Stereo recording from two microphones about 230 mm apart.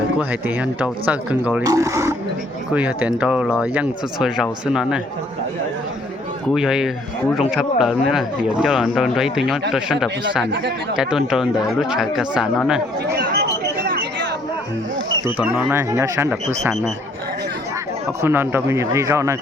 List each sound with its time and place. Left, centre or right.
0.2 s speech: centre
6.5 s speech: centre
13.1 s chatter: right
15.4 s speech: centre
18.2 s speech: centre